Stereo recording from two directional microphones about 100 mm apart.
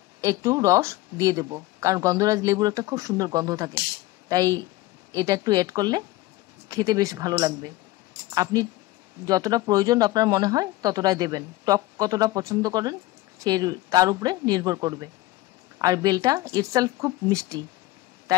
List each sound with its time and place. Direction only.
0.2 s speech: 30° right (ahead or behind)